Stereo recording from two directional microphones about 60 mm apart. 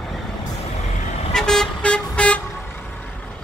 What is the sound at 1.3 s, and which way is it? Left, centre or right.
Vehicle, centre.